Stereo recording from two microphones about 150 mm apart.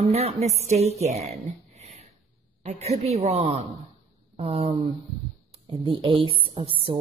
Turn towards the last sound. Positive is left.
turn(degrees=-40)  # may be behind; listen again after turning